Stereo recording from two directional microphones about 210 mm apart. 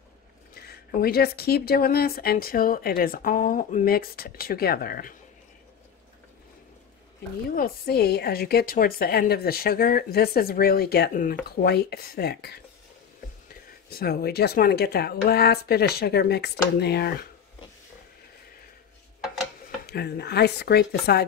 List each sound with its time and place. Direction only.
0.6 s speech: 45° left (ahead or behind)
7.5 s speech: 45° left (ahead or behind)
13.8 s speech: 45° left (ahead or behind)
19.9 s speech: 50° left (ahead or behind)